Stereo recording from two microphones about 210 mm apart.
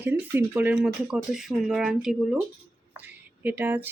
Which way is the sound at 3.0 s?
10° right (ahead or behind).